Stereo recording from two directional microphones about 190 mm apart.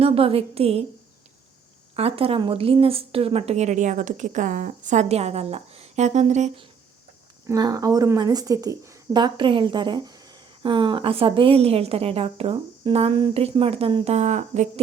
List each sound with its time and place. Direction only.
0.0 s speech: 30° right (ahead or behind)
2.0 s speech: 30° right (ahead or behind)
7.4 s speech: 20° right (ahead or behind); by 14.7 s 40° right (ahead or behind)